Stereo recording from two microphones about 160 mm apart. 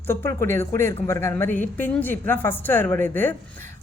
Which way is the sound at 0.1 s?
15° left (ahead or behind).